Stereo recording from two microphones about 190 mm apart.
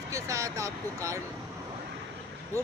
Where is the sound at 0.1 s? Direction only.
15° right (ahead or behind).